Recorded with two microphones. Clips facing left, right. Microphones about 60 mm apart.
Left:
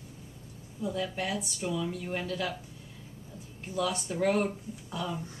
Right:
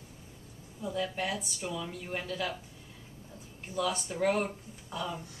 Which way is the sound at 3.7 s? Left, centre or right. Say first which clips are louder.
Left 1 dB; centre.